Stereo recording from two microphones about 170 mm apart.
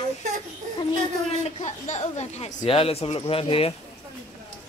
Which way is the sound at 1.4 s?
40° left (ahead or behind).